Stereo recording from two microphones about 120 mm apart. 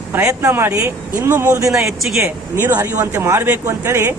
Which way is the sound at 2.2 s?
15° right (ahead or behind).